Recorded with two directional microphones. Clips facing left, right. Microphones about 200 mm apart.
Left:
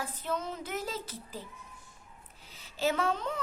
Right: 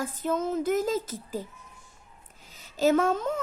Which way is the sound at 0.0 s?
45° right (ahead or behind).